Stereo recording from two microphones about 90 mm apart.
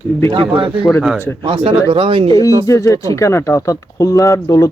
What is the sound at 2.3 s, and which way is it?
Speech, 40° left (ahead or behind).